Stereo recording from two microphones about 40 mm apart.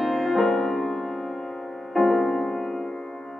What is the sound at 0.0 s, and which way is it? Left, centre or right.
Music, centre.